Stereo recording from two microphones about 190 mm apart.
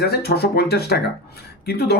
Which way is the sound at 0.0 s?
55° left (ahead or behind).